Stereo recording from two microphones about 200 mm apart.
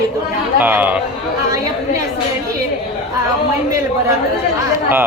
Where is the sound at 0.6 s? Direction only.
10° right (ahead or behind).